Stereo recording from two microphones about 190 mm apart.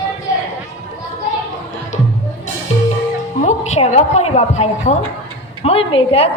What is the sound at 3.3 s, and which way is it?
A woman's voice, 35° left (ahead or behind).